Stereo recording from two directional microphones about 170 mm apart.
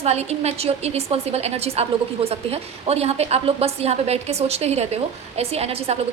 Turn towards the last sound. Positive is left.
turn(degrees=-35)  # may be behind; listen again after turning